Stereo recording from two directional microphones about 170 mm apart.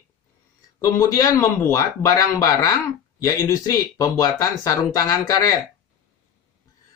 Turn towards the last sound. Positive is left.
turn(degrees=20)  # may be behind; listen again after turning